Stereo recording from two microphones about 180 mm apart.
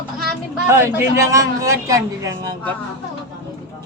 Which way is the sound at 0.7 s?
15° right (ahead or behind).